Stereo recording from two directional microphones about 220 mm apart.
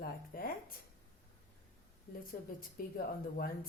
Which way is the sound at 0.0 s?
40° left (ahead or behind).